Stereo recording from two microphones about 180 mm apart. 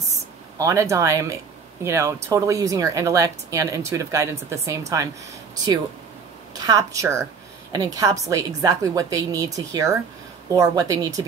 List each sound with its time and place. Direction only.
0.6 s speech: 15° right (ahead or behind)
6.5 s a woman's voice: 20° right (ahead or behind)